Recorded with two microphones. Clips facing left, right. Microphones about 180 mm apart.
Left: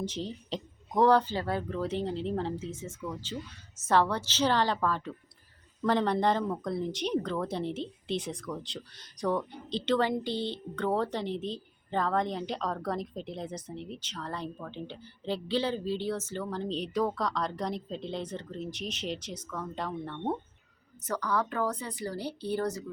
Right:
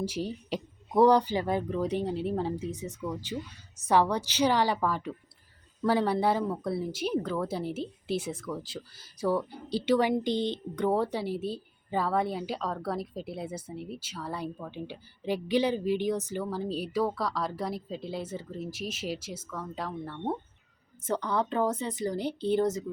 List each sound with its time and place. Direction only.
0.0 s speech: 10° right (ahead or behind)
21.0 s speech: 25° right (ahead or behind)